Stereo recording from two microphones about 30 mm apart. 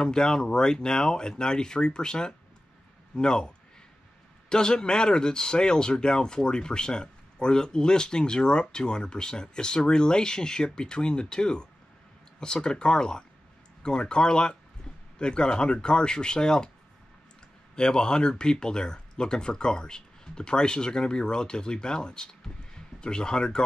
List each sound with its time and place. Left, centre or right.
0.0 s speech: left
17.7 s speech: left